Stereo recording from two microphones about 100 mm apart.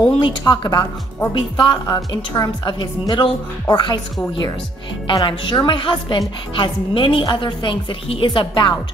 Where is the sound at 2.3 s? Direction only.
45° left (ahead or behind).